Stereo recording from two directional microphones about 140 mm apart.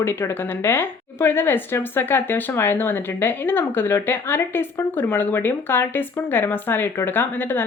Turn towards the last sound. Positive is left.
turn(degrees=15)  # may be behind; listen again after turning